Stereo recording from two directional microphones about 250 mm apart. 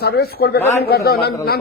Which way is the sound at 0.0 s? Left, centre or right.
Left.